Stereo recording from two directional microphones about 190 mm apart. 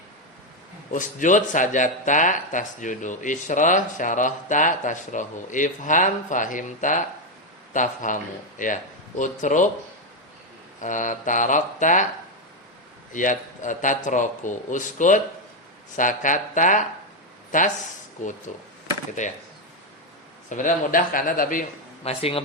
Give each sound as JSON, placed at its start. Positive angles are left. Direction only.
{"t": 0.9, "sound": "speech", "side_deg": 40}
{"t": 10.8, "sound": "speech", "side_deg": 40}
{"t": 13.1, "sound": "speech", "side_deg": 40}
{"t": 20.5, "sound": "speech", "side_deg": 40}
{"t": 22.0, "sound": "speech", "side_deg": 30}